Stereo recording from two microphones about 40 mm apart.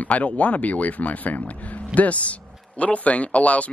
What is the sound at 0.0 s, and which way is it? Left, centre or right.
Speech, left.